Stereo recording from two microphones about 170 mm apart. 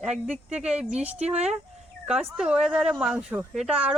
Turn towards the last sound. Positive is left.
turn(degrees=-5)  # may be behind; listen again after turning